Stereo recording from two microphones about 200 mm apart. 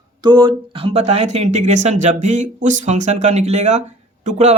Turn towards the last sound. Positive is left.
turn(degrees=-35)  # may be behind; listen again after turning